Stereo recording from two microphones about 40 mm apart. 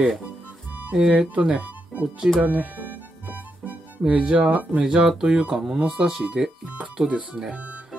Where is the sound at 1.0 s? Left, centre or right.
Right.